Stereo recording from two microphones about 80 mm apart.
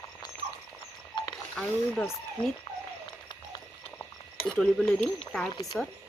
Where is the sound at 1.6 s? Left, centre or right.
Centre.